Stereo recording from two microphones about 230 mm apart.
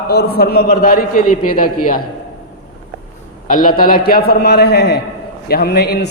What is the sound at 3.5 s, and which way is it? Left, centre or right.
A man's voice, left.